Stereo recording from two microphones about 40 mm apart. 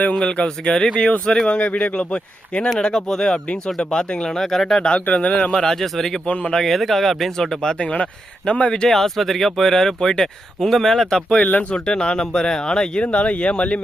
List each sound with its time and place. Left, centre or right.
0.2 s speech: left
1.5 s a man's voice: left
2.7 s speech: centre
4.3 s speech: centre
5.0 s a man's voice: left
5.5 s speech: centre
6.2 s speech: left
6.5 s speech: centre
8.4 s speech: left
8.9 s speech: centre
11.7 s speech: left